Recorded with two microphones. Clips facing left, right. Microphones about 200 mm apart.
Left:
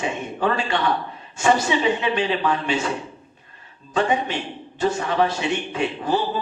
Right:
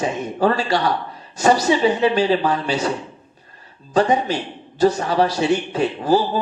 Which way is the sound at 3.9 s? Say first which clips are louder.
Right 4 dB; 40° right (ahead or behind).